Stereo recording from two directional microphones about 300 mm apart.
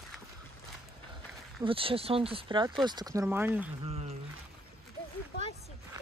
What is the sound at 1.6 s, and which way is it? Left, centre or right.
Speech, centre.